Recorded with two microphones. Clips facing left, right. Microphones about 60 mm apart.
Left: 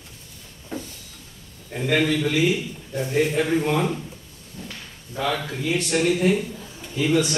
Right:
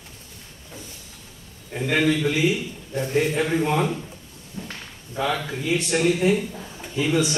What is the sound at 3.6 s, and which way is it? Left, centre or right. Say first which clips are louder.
Speech: even; centre.